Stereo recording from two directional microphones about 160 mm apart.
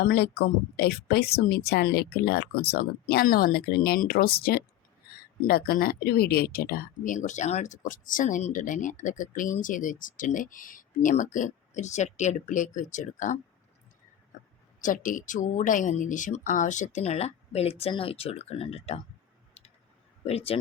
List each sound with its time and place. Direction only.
0.0 s speech: 80° left; by 13.4 s 50° left (ahead or behind)
14.3 s a sound: 55° left (ahead or behind)
14.8 s speech: 55° left (ahead or behind); by 19.0 s 40° left (ahead or behind)
20.2 s speech: 40° left (ahead or behind)